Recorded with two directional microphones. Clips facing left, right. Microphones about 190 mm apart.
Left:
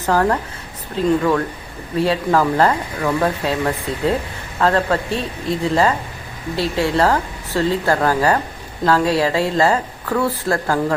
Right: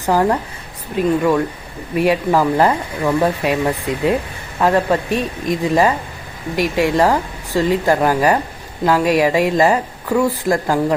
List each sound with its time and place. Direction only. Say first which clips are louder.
0.0 s speech: right 1 dB; 15° right (ahead or behind)